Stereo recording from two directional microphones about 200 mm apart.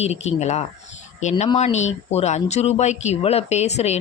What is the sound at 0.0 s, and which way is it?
Speech, 30° left (ahead or behind).